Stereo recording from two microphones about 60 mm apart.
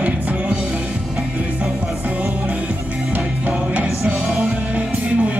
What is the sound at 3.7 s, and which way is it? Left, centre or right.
Music, right.